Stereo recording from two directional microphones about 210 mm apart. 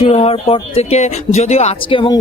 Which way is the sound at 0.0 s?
30° left (ahead or behind).